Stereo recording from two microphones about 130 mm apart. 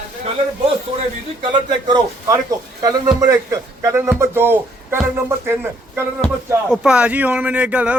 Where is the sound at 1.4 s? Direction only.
35° right (ahead or behind).